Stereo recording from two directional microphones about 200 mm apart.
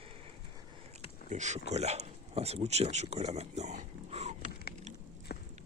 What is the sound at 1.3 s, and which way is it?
Speech, 35° right (ahead or behind).